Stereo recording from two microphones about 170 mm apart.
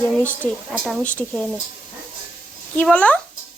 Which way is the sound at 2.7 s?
5° left (ahead or behind).